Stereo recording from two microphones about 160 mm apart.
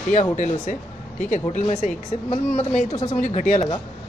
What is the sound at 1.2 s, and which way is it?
Speech, 55° left (ahead or behind).